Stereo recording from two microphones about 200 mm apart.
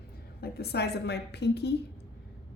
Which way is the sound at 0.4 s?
55° left (ahead or behind).